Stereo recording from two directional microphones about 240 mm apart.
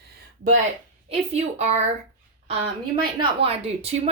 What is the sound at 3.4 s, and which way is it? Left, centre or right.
Speech, right.